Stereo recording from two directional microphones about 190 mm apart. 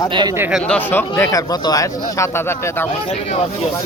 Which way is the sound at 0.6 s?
5° left (ahead or behind).